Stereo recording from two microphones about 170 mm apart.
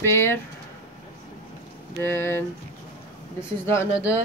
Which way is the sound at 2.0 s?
15° left (ahead or behind).